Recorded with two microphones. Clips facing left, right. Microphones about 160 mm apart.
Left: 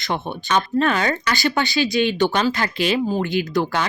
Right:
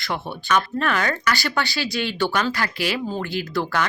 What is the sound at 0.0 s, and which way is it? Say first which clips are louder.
Speech: left 3 dB; 20° left (ahead or behind).